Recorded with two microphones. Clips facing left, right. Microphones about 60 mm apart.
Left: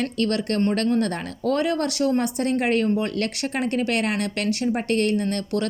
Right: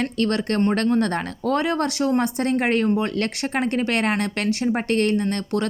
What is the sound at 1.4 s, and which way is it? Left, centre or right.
Speech, right.